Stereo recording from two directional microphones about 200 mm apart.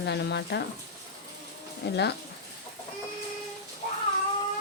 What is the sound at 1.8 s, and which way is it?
Speech, 55° left (ahead or behind).